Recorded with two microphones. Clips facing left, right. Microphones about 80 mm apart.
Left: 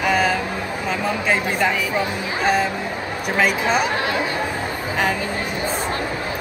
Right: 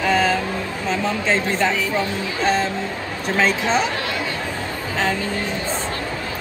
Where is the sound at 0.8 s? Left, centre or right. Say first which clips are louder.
Even; centre.